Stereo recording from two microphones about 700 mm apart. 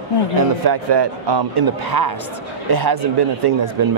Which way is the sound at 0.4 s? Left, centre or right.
Right.